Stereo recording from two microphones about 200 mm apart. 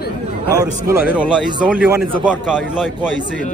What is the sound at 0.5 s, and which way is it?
A man's voice, 15° right (ahead or behind).